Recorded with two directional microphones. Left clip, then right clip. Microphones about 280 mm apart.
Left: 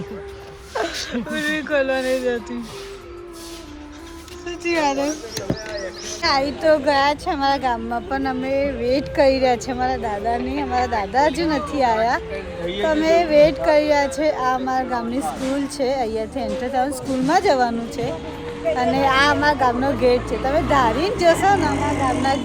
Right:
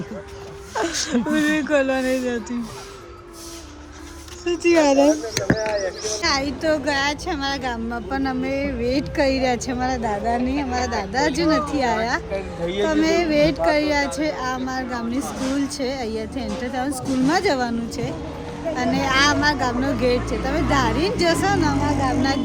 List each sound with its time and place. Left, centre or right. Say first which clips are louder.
0.7 s speech: right 1 dB; centre
4.6 s speech: right 4 dB; centre
5.5 s speech: right 7 dB; right
6.2 s speech: left 4 dB; centre
20.1 s speech: left 3 dB; centre
20.5 s speech: left 4 dB; centre